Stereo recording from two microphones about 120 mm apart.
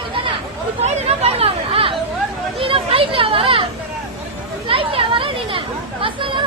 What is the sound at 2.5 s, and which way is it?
Children playing, 50° right (ahead or behind).